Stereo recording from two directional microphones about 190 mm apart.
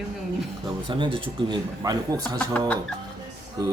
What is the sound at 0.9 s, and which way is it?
Speech, 25° right (ahead or behind).